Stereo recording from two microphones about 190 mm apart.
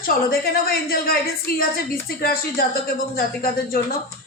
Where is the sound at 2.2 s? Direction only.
50° left (ahead or behind).